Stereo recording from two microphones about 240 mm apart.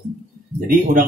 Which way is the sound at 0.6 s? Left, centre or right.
Right.